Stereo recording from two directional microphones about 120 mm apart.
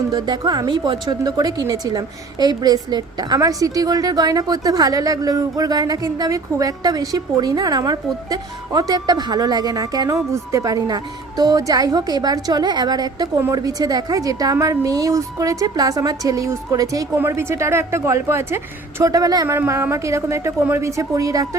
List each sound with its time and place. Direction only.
0.1 s a woman's voice: 35° right (ahead or behind)